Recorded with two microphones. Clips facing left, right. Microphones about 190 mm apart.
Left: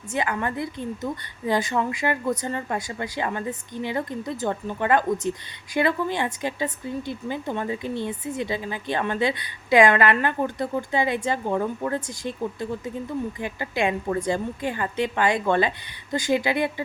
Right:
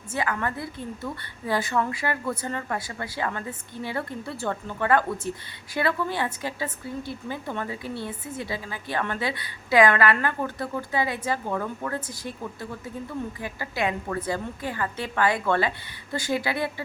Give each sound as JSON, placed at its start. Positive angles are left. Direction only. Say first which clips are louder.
{"t": 0.1, "sound": "a woman's voice", "louder": "left 2 dB", "side_deg": 20}